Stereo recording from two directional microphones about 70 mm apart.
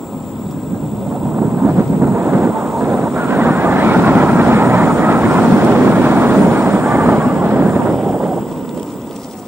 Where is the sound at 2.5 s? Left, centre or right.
Centre.